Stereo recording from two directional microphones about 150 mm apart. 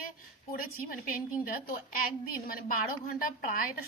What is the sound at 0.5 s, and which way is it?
A woman's voice, 75° left (ahead or behind).